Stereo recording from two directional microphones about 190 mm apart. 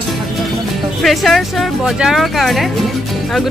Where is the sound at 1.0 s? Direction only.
Centre (ahead or behind).